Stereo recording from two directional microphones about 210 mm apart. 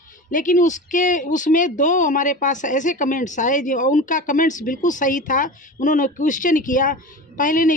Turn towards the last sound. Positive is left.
turn(degrees=40)  # may be behind; listen again after turning